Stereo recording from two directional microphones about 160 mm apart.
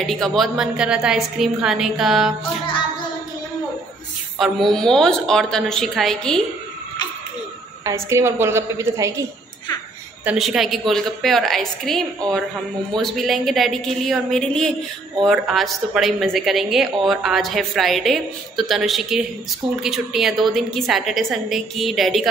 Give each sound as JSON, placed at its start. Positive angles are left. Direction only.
{"t": 0.0, "sound": "a woman's voice", "side_deg": 5}
{"t": 4.4, "sound": "a woman's voice", "side_deg": 0}
{"t": 7.8, "sound": "a woman's voice", "side_deg": -15}
{"t": 10.2, "sound": "a woman's voice", "side_deg": -5}